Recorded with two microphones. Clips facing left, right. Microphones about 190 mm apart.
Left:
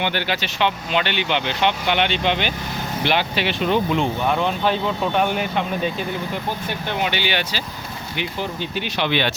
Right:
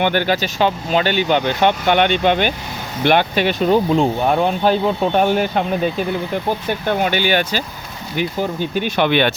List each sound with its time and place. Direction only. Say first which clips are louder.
0.0 s speech: right 7 dB; 45° right (ahead or behind)
6.8 s speech: right 6 dB; 45° right (ahead or behind)